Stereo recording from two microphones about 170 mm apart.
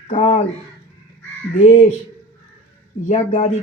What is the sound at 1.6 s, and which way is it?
Speech, 45° left (ahead or behind).